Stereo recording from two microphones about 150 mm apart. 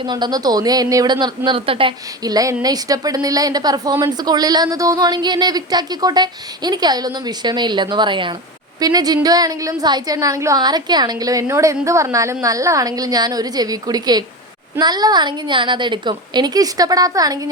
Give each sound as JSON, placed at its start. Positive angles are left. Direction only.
{"t": 0.0, "sound": "a woman's voice", "side_deg": -30}
{"t": 2.2, "sound": "a woman's voice", "side_deg": -25}